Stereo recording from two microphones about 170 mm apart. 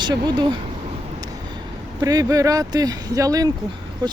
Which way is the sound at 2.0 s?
20° right (ahead or behind).